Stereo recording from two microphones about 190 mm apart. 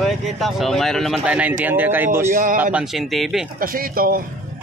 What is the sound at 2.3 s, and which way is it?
Speech, 45° right (ahead or behind).